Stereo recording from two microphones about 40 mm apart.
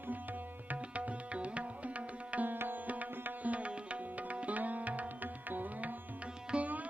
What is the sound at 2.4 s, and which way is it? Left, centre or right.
Music, right.